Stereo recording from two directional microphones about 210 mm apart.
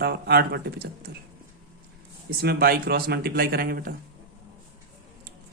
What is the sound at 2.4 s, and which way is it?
Speech, 45° right (ahead or behind).